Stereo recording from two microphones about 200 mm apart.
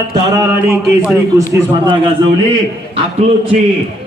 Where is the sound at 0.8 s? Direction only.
Centre (ahead or behind).